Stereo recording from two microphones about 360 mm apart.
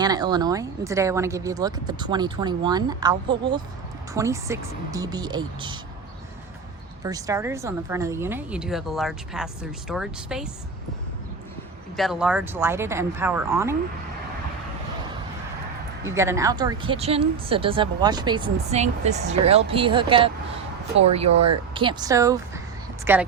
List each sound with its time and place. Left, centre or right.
0.0 s speech: centre
7.0 s speech: centre
11.9 s speech: centre
16.0 s speech: centre
21.8 s speech: centre